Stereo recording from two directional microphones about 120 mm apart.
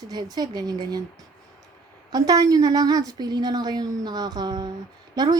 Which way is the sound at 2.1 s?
35° right (ahead or behind).